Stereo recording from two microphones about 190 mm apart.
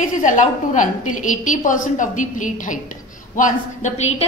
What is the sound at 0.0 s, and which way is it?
A woman's voice, 40° left (ahead or behind).